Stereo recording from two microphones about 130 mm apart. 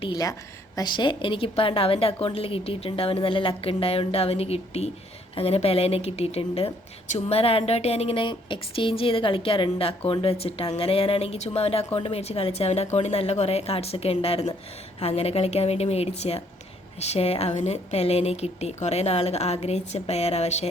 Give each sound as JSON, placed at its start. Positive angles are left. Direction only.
{"t": 0.8, "sound": "a woman's voice", "side_deg": 40}